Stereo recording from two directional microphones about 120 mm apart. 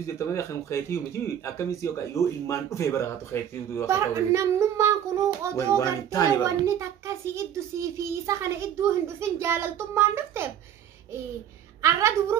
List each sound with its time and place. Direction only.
0.0 s speech: 25° left (ahead or behind)
3.8 s a child's voice: 25° right (ahead or behind)
5.8 s speech: 30° left (ahead or behind)
6.4 s a child's voice: 25° right (ahead or behind)
11.8 s a child's voice: 25° right (ahead or behind)